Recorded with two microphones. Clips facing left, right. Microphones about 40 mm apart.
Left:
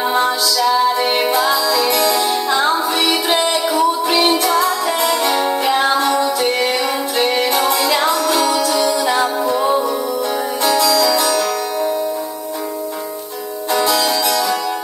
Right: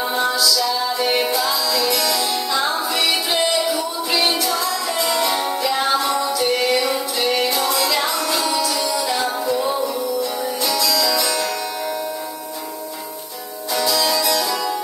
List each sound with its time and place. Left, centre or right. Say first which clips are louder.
0.0 s music: left 3 dB; left
13.7 s music: left 3 dB; left